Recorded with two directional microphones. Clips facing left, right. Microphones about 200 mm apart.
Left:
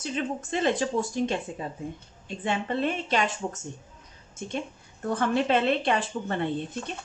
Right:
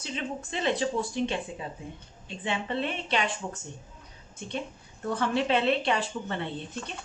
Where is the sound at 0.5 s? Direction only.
45° left (ahead or behind).